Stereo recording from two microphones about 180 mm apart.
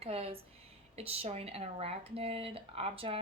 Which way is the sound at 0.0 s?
35° right (ahead or behind).